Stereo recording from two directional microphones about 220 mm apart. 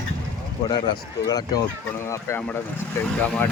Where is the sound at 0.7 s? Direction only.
20° left (ahead or behind).